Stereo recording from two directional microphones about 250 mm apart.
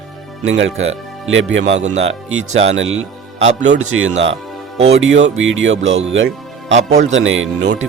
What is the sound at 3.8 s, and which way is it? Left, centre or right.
Speech, right.